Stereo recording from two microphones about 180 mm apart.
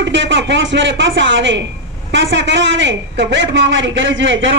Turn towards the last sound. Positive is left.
turn(degrees=-90)